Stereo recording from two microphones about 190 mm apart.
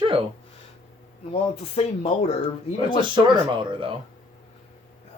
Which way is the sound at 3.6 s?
25° right (ahead or behind).